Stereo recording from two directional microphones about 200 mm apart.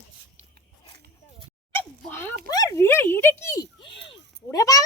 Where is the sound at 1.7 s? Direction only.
10° left (ahead or behind).